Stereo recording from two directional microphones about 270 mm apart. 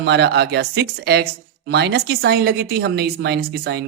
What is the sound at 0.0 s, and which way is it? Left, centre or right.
A woman's voice, right.